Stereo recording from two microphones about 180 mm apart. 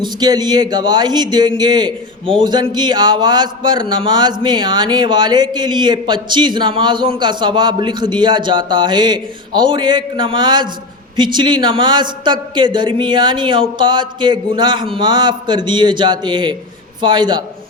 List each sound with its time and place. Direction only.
0.0 s speech: 25° right (ahead or behind)